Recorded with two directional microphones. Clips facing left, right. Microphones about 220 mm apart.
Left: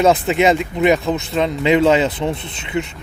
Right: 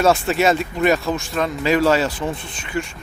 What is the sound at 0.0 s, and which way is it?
Speech, 20° left (ahead or behind).